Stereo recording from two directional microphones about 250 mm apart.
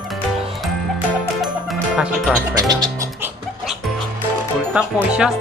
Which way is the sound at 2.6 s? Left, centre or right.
Centre.